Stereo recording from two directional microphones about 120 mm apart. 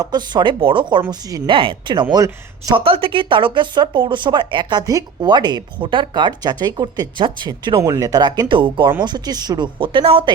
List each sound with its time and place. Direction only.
0.0 s speech: 35° right (ahead or behind)
2.1 s speech: 30° right (ahead or behind)
2.7 s speech: 50° right (ahead or behind)
7.8 s speech: 30° right (ahead or behind); by 10.3 s 45° right (ahead or behind)